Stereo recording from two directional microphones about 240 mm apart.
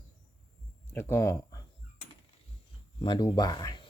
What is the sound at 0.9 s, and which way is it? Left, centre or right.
Speech, centre.